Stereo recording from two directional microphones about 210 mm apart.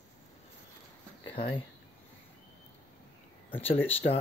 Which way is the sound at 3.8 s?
10° left (ahead or behind).